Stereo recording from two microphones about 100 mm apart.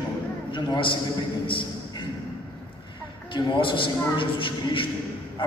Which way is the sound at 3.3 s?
50° left (ahead or behind).